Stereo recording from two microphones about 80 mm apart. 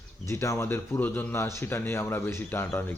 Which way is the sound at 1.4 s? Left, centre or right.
Left.